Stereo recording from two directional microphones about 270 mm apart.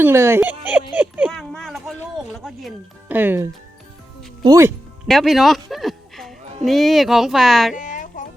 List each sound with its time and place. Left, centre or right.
0.0 s speech: centre
5.0 s speech: centre
7.8 s a sound: left